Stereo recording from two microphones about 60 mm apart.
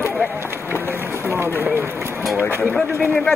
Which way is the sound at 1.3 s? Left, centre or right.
Right.